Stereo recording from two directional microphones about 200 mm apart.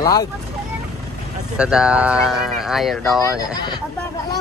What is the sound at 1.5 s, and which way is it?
Speech, 5° right (ahead or behind).